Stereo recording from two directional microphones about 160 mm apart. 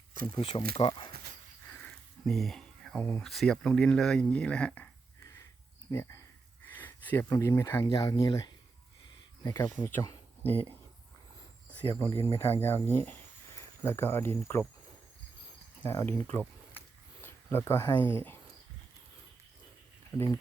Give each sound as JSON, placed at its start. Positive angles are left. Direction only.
{"t": 0.3, "sound": "speech", "side_deg": 35}
{"t": 1.8, "sound": "speech", "side_deg": 0}
{"t": 11.9, "sound": "speech", "side_deg": 15}
{"t": 15.8, "sound": "speech", "side_deg": 15}
{"t": 20.1, "sound": "speech", "side_deg": 15}